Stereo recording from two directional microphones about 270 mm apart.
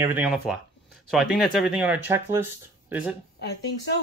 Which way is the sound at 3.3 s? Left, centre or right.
Left.